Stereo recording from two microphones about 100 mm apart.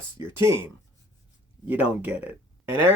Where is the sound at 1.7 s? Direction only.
20° right (ahead or behind).